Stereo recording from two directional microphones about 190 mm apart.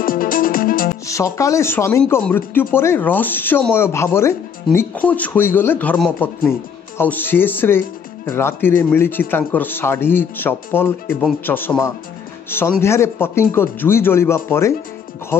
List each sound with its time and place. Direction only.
0.0 s music: 45° left (ahead or behind)
1.0 s speech: 15° left (ahead or behind)